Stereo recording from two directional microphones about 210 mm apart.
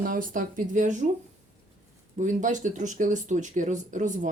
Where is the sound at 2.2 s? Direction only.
35° right (ahead or behind).